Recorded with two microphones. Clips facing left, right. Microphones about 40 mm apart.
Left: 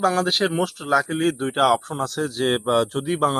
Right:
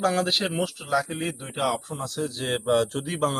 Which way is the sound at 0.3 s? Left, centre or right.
Left.